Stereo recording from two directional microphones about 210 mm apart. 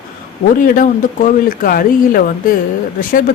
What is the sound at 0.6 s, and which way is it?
Speech, 40° left (ahead or behind).